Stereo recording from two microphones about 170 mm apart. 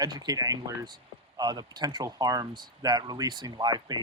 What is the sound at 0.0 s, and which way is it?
Speech, 25° right (ahead or behind).